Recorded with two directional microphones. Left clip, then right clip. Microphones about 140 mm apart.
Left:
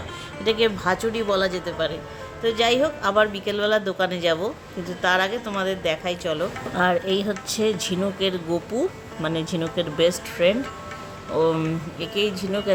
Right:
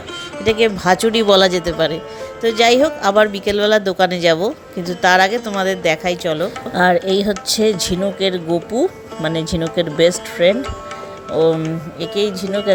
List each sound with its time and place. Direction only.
0.4 s speech: 30° right (ahead or behind)
0.9 s speech: 40° right (ahead or behind); by 8.9 s 20° right (ahead or behind)
9.2 s speech: 35° right (ahead or behind)